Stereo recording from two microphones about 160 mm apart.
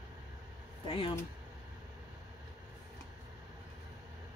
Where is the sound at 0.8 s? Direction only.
35° left (ahead or behind).